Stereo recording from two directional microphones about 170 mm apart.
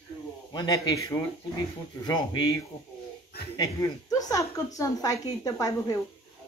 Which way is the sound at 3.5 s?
20° left (ahead or behind).